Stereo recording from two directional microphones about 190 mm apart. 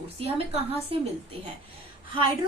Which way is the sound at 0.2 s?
30° right (ahead or behind).